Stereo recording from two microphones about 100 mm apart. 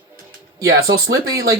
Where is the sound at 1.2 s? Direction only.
35° right (ahead or behind).